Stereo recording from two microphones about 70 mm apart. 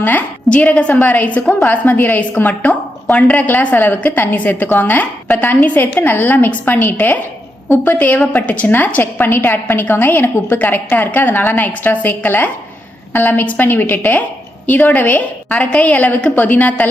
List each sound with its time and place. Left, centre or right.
0.0 s a woman's voice: left